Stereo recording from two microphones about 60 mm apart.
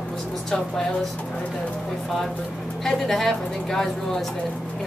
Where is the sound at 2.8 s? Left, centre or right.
Centre.